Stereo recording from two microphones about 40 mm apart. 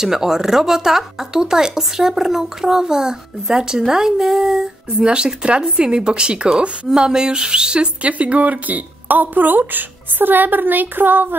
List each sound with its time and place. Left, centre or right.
0.0 s speech: centre
4.9 s speech: right
8.1 s speech: right